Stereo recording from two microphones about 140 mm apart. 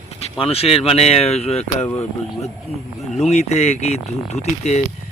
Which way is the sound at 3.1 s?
55° left (ahead or behind).